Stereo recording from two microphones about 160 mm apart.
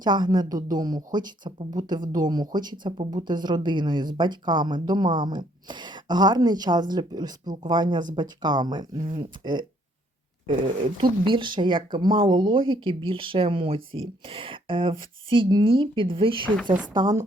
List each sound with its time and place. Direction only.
0.0 s a woman's voice: 25° right (ahead or behind)
9.0 s speech: 55° right (ahead or behind)
9.4 s a woman's voice: 30° right (ahead or behind)
11.3 s a woman's voice: 30° right (ahead or behind)